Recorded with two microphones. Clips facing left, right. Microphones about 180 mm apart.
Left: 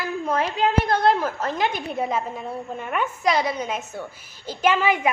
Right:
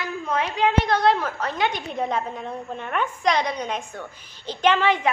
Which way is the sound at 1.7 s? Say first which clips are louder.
Left 1 dB; 5° left (ahead or behind).